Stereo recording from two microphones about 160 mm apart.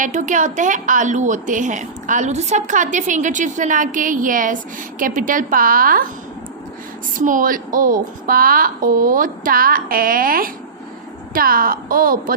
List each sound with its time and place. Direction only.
0.0 s a woman's voice: 50° right (ahead or behind)
7.2 s a woman's voice: 55° right (ahead or behind)